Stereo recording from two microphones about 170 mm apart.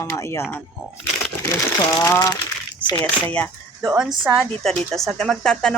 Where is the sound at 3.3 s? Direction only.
5° left (ahead or behind).